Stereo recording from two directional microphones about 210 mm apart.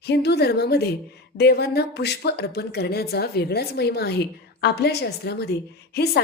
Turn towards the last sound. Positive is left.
turn(degrees=50)  # may be behind; listen again after turning